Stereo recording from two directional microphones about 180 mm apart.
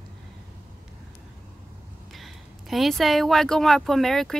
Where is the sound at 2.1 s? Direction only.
Centre (ahead or behind).